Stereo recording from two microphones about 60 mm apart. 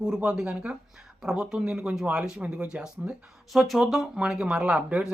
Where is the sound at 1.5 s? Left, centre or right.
Centre.